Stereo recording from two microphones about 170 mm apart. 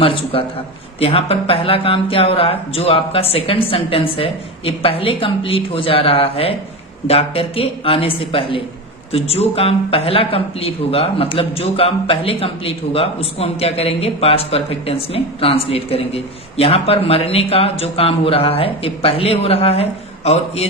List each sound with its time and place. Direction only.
0.0 s a man's voice: 30° left (ahead or behind)